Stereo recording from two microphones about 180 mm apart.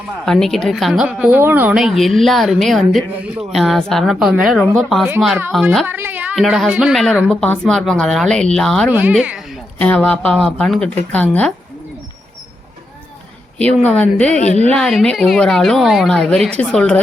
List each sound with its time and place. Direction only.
0.3 s a woman's voice: 5° left (ahead or behind)
5.8 s a woman's voice: 10° right (ahead or behind)
6.3 s a woman's voice: centre (ahead or behind)
8.9 s speech: 10° right (ahead or behind)
9.8 s a woman's voice: 10° left (ahead or behind)
13.6 s speech: 5° left (ahead or behind)
14.3 s speech: 40° left (ahead or behind)
14.7 s a woman's voice: 5° left (ahead or behind)